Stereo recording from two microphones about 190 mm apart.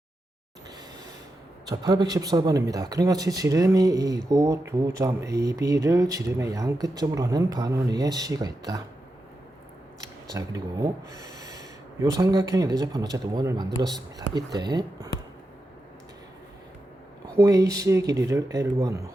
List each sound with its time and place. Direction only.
1.6 s speech: 20° right (ahead or behind)
10.2 s speech: 20° right (ahead or behind)
17.3 s speech: 15° right (ahead or behind)